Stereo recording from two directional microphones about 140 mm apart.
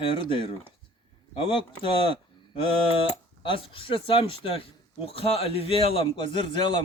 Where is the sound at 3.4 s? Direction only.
40° left (ahead or behind).